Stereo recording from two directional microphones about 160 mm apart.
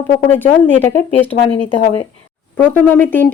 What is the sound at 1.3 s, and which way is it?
Speech, 40° left (ahead or behind).